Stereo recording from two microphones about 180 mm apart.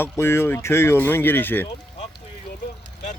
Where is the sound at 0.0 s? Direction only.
15° left (ahead or behind).